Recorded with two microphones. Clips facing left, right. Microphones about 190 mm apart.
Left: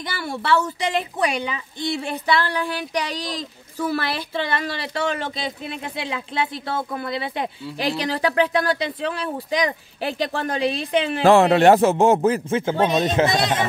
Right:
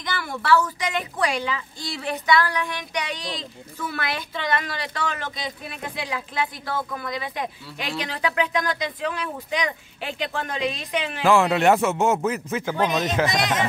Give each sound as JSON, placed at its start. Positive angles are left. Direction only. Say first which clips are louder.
{"t": 0.1, "sound": "a woman's voice", "louder": "right 1 dB", "side_deg": 30}